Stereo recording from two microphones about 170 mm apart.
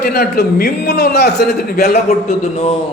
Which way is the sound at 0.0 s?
75° left (ahead or behind).